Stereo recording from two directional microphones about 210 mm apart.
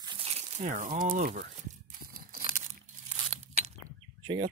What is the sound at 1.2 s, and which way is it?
Crumpling, 40° right (ahead or behind).